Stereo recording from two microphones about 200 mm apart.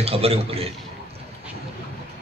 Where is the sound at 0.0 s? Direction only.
30° right (ahead or behind).